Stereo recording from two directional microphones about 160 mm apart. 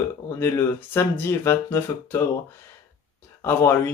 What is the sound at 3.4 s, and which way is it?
Speech, 15° left (ahead or behind).